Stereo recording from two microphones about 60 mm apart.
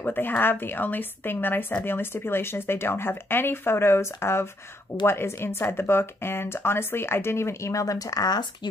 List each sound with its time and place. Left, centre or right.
0.0 s a woman's voice: left
7.7 s speech: left